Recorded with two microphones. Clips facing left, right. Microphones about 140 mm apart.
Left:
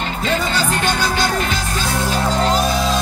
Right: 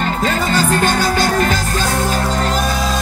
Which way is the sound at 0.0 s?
45° right (ahead or behind).